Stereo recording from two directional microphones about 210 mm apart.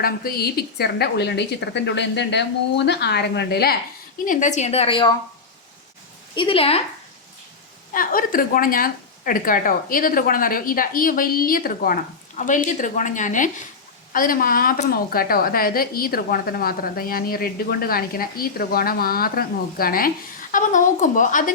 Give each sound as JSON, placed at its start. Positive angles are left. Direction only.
{"t": 0.0, "sound": "a woman's voice", "side_deg": 45}
{"t": 4.3, "sound": "a woman's voice", "side_deg": 35}
{"t": 6.3, "sound": "a woman's voice", "side_deg": 25}
{"t": 7.9, "sound": "a woman's voice", "side_deg": 40}